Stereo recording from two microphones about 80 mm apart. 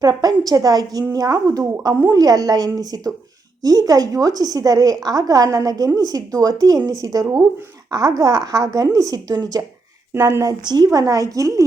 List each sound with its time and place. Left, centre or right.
0.0 s a woman's voice: right